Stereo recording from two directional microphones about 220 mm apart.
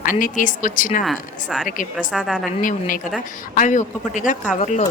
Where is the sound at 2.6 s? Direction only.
35° left (ahead or behind).